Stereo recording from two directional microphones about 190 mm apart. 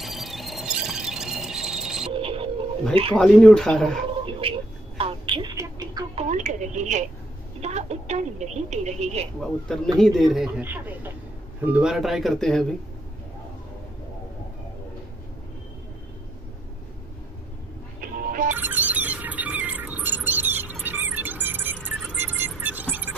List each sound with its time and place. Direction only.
0.0 s a sound: centre (ahead or behind)
2.1 s a sound: 30° right (ahead or behind)
2.9 s speech: 30° right (ahead or behind)
3.2 s speech: 5° left (ahead or behind)
4.1 s a sound: 25° right (ahead or behind)
6.1 s a woman's voice: 40° right (ahead or behind)
9.9 s speech: centre (ahead or behind)
18.0 s music: 45° right (ahead or behind)
18.5 s music: 10° right (ahead or behind)